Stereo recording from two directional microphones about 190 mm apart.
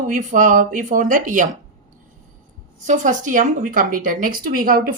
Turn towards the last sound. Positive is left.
turn(degrees=-50)  # may be behind; listen again after turning